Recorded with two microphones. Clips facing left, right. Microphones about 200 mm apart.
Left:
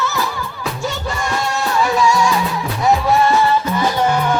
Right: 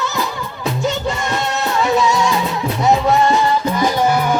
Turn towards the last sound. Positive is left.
turn(degrees=-10)  # may be behind; listen again after turning